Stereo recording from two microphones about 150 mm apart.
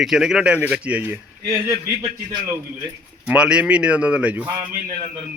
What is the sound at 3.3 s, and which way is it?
A man's voice, 5° right (ahead or behind).